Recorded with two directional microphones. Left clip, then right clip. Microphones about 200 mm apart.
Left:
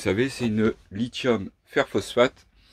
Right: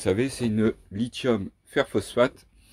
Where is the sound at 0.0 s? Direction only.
10° right (ahead or behind).